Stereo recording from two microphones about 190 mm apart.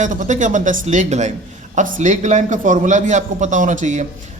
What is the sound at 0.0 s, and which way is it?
A man's voice, 40° right (ahead or behind).